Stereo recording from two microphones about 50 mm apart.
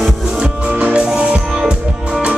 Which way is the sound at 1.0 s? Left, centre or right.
Centre.